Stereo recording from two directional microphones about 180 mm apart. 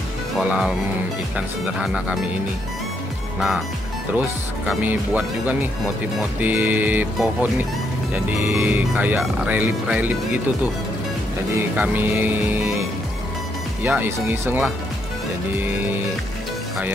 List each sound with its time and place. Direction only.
0.4 s speech: 5° right (ahead or behind)
3.3 s speech: centre (ahead or behind)
4.6 s speech: 10° right (ahead or behind)
11.5 s speech: 10° right (ahead or behind)
13.8 s speech: 10° right (ahead or behind)